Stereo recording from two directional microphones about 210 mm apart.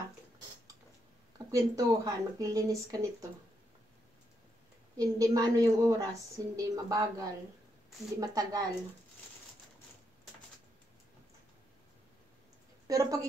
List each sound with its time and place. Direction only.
1.5 s a woman's voice: 15° right (ahead or behind)
4.9 s a woman's voice: 15° right (ahead or behind)
12.8 s a woman's voice: 15° right (ahead or behind)